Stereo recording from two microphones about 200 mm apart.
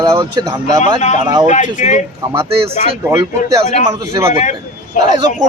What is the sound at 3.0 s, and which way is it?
Speech, 15° right (ahead or behind).